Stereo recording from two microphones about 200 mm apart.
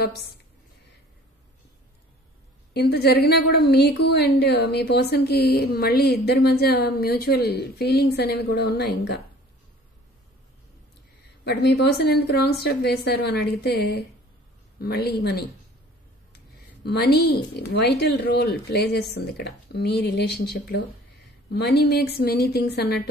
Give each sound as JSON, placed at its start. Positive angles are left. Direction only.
{"t": 2.7, "sound": "a woman's voice", "side_deg": 55}
{"t": 11.4, "sound": "a woman's voice", "side_deg": 55}
{"t": 16.8, "sound": "a woman's voice", "side_deg": 55}